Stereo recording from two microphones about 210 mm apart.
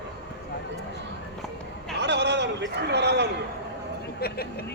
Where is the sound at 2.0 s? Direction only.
55° right (ahead or behind).